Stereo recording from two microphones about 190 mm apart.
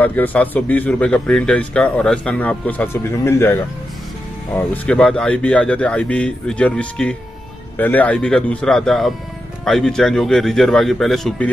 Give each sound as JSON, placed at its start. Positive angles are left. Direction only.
{"t": 0.0, "sound": "speech", "side_deg": 10}